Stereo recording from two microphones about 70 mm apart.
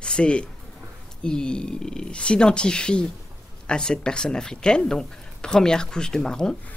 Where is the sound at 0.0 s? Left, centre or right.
Centre.